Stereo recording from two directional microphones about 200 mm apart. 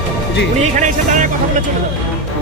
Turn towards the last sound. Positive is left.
turn(degrees=-40)  # may be behind; listen again after turning